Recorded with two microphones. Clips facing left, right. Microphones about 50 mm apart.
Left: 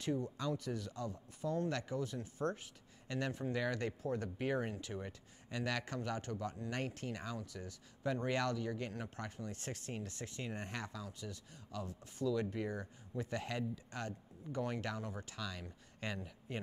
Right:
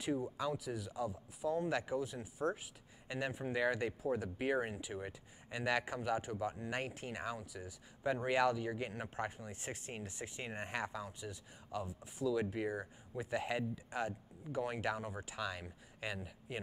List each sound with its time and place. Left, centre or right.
0.0 s speech: centre
16.0 s speech: centre